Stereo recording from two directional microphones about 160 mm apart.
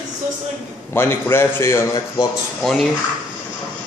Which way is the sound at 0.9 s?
15° left (ahead or behind).